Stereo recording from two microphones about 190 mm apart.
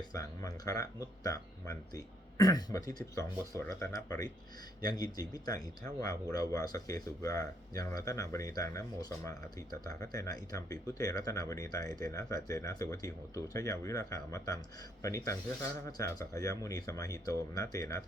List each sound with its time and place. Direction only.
0.1 s speech: 20° left (ahead or behind)